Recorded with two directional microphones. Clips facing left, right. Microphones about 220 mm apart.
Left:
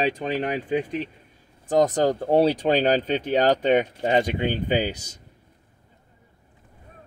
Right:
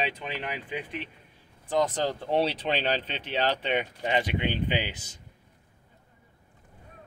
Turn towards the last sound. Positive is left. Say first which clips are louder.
# left 7 dB
turn(degrees=40)  # may be behind; listen again after turning